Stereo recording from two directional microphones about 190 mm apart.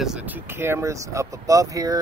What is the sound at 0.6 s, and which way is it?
Speech, 15° right (ahead or behind).